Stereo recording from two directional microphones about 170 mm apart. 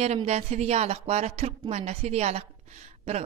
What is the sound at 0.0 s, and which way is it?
A woman's voice, 40° right (ahead or behind).